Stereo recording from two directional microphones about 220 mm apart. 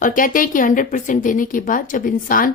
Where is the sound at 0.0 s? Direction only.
40° left (ahead or behind).